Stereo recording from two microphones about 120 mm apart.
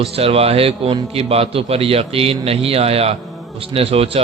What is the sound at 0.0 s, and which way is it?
A man's voice, 55° right (ahead or behind).